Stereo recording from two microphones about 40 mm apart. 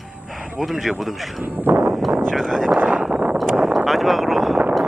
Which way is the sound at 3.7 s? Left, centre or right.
Centre.